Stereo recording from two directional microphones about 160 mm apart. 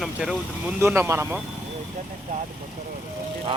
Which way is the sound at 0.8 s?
15° right (ahead or behind).